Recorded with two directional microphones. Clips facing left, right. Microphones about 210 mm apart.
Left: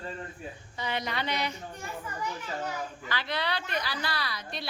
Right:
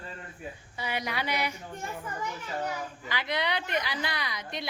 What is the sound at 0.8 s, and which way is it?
Speech, 10° right (ahead or behind).